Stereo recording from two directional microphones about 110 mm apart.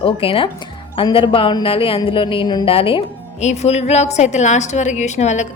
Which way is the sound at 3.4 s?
90° left.